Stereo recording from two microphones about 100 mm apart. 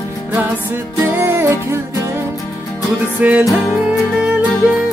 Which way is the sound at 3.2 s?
15° right (ahead or behind).